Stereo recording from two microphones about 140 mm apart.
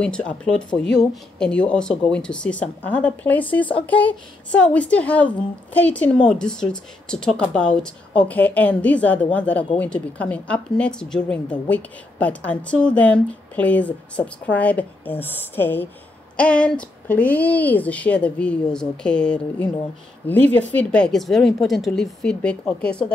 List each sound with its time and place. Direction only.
0.0 s speech: 5° left (ahead or behind)